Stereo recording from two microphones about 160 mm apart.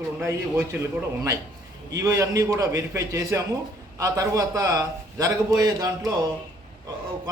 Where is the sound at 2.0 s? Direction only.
20° right (ahead or behind).